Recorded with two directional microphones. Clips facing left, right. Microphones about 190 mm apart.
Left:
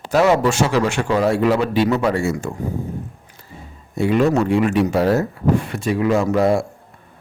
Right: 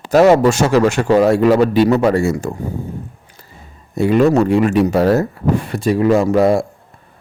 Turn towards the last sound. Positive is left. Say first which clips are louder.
# right 4 dB
turn(degrees=-35)  # may be behind; listen again after turning